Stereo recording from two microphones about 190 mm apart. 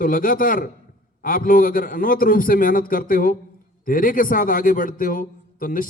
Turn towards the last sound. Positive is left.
turn(degrees=45)  # may be behind; listen again after turning